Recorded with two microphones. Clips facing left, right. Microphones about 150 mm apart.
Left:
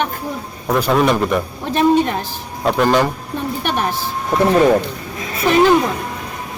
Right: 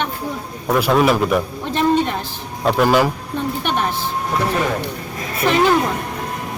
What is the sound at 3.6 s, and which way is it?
Speech, 10° left (ahead or behind).